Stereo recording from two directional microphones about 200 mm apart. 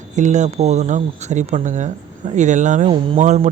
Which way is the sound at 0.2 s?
35° right (ahead or behind).